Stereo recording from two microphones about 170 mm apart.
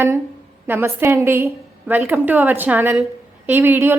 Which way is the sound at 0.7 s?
15° right (ahead or behind).